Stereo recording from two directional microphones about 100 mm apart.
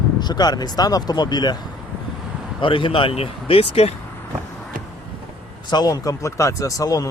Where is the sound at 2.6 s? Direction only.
60° left (ahead or behind); by 4.0 s 90° left.